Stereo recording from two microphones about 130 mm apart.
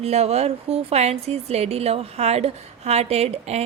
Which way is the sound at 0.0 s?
55° right (ahead or behind).